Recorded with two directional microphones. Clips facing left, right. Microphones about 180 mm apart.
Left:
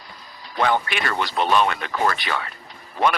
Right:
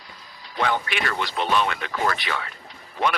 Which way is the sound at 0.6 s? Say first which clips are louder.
Left 3 dB; 45° left (ahead or behind).